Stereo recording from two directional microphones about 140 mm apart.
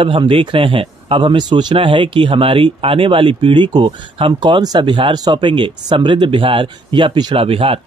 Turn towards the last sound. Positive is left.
turn(degrees=-40)  # may be behind; listen again after turning